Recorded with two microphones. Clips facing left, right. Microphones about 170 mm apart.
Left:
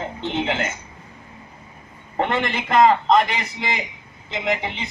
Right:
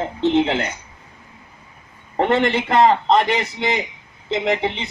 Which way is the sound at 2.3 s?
30° right (ahead or behind).